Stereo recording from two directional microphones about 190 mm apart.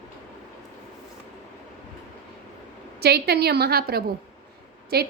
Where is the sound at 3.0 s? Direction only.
55° right (ahead or behind).